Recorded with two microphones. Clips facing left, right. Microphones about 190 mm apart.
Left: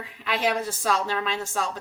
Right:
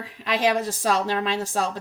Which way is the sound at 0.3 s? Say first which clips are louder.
Right 3 dB; 40° right (ahead or behind).